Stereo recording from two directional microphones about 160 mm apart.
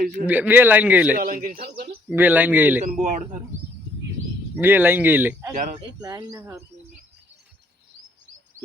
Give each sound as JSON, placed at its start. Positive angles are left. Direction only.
{"t": 0.3, "sound": "speech", "side_deg": -10}
{"t": 1.1, "sound": "speech", "side_deg": -60}
{"t": 2.1, "sound": "speech", "side_deg": -10}
{"t": 2.8, "sound": "a man's voice", "side_deg": -45}
{"t": 4.6, "sound": "speech", "side_deg": -15}
{"t": 5.5, "sound": "a man's voice", "side_deg": -50}
{"t": 6.0, "sound": "speech", "side_deg": -25}